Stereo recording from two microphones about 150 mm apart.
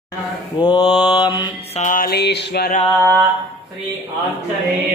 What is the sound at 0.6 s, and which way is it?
Mantra, 30° left (ahead or behind).